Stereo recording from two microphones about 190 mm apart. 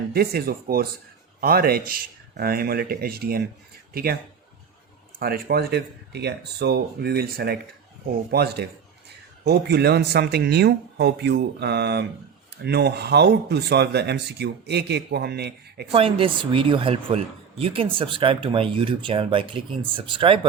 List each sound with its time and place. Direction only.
0.1 s speech: 55° right (ahead or behind)
5.2 s speech: 55° right (ahead or behind)
15.9 s speech: 30° right (ahead or behind)